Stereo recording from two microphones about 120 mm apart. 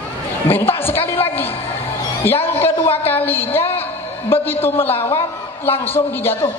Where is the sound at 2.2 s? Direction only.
15° left (ahead or behind).